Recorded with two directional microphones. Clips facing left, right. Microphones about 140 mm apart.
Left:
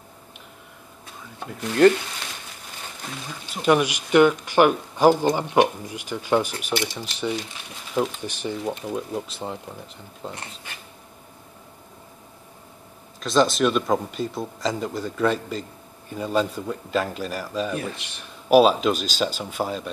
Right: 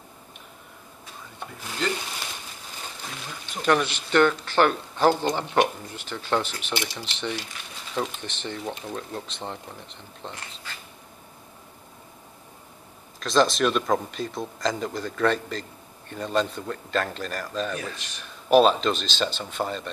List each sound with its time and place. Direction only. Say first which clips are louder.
3.6 s speech: left 3 dB; 10° left (ahead or behind)
10.3 s speech: left 3 dB; 25° left (ahead or behind)
13.2 s speech: left 2 dB; centre (ahead or behind)